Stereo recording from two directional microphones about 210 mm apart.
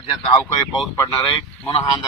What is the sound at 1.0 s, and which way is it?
Speech, 15° left (ahead or behind).